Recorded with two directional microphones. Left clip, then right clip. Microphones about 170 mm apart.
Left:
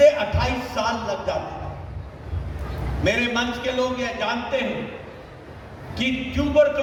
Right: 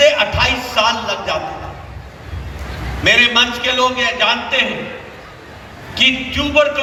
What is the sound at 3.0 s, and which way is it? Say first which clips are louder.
A man's voice: right 11 dB; 90° left.